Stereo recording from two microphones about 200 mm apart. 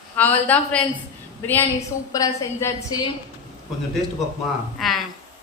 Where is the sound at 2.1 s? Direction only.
15° left (ahead or behind).